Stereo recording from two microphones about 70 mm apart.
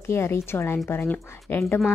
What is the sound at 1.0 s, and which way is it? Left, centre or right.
Speech, left.